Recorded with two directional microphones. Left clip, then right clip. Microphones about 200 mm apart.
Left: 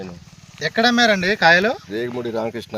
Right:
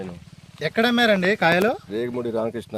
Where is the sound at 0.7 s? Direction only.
35° right (ahead or behind).